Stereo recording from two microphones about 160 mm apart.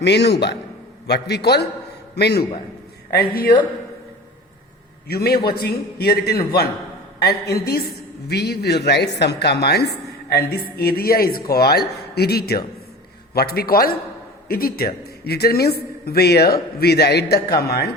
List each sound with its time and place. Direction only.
0.0 s a woman's voice: 90° left
3.1 s speech: 70° left (ahead or behind)
5.0 s speech: 75° left (ahead or behind)
7.2 s a man's voice: 85° left
7.6 s speech: 75° left (ahead or behind)
8.3 s a woman's voice: 90° left
10.3 s a man's voice: 70° left (ahead or behind)